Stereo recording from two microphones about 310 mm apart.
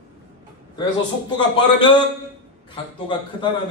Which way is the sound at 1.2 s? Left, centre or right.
Centre.